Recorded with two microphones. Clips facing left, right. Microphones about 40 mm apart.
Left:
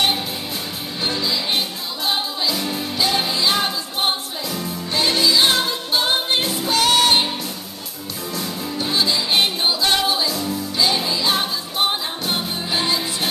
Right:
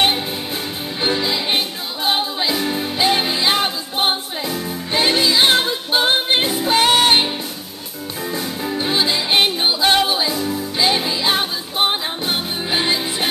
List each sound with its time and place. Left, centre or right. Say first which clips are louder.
1.0 s music: right 3 dB; right